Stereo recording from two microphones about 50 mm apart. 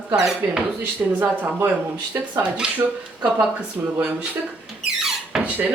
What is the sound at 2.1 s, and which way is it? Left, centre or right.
Speech, right.